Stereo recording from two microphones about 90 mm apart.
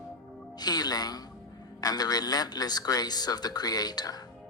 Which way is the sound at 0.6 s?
50° left (ahead or behind).